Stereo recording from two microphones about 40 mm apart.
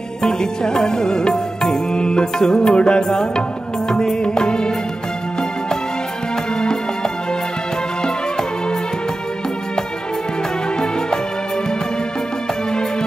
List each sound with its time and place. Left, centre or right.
0.2 s music: centre
8.0 s music: centre